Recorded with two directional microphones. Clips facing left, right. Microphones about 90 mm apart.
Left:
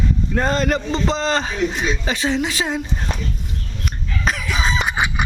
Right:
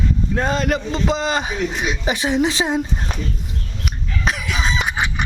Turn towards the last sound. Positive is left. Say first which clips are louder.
# left 1 dB
turn(degrees=0)  # may be behind; listen again after turning